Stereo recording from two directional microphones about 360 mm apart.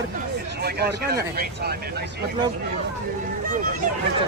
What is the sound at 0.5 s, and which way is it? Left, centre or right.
Speech, right.